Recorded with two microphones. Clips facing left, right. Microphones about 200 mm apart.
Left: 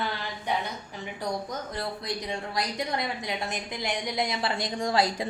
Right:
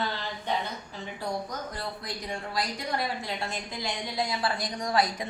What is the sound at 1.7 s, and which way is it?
A woman's voice, 20° left (ahead or behind).